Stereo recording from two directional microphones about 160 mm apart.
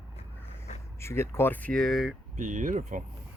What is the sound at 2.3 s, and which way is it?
Speech, 55° right (ahead or behind).